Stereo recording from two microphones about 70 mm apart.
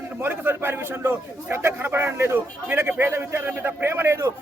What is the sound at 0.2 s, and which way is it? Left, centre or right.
A man's voice, right.